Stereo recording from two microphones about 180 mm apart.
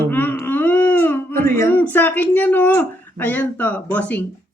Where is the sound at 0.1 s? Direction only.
10° left (ahead or behind).